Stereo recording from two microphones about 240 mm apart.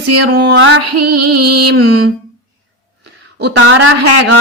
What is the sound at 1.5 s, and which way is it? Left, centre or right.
Mantra, right.